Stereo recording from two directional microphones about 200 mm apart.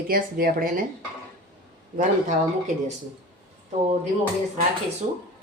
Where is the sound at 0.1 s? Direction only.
45° right (ahead or behind).